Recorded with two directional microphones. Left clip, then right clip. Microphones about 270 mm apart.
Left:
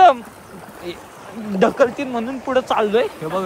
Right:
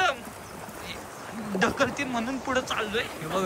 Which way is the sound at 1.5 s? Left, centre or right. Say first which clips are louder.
Left 9 dB; centre.